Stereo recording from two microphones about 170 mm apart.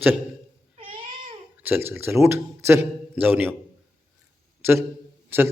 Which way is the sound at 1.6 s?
10° right (ahead or behind).